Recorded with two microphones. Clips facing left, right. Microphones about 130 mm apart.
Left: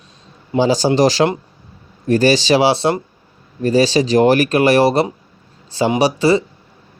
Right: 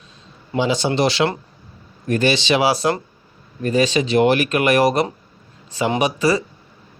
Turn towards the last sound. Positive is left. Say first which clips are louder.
# left 4 dB
turn(degrees=30)  # may be behind; listen again after turning